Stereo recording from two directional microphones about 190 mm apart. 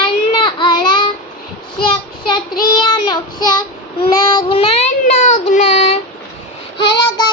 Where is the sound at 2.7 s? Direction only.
25° left (ahead or behind).